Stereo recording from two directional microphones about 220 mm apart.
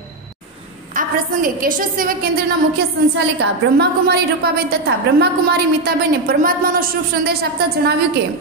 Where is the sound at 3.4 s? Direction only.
50° right (ahead or behind).